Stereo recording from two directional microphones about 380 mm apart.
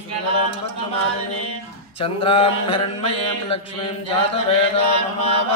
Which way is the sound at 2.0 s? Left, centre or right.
Centre.